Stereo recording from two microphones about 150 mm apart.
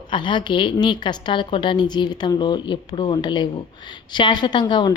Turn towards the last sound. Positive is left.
turn(degrees=30)  # may be behind; listen again after turning